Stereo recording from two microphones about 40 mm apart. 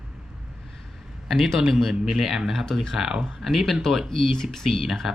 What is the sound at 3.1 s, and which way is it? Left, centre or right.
Speech, centre.